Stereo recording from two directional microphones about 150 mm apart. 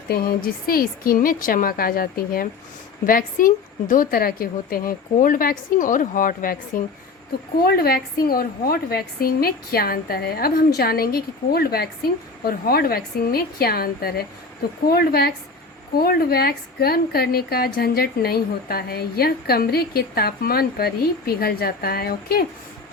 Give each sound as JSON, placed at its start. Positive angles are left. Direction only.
{"t": 0.1, "sound": "a woman's voice", "side_deg": 80}
{"t": 7.6, "sound": "a woman's voice", "side_deg": 90}